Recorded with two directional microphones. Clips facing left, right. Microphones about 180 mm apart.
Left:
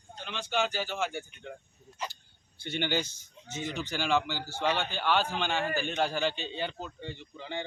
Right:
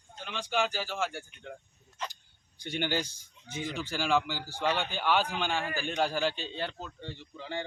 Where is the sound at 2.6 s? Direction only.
10° right (ahead or behind).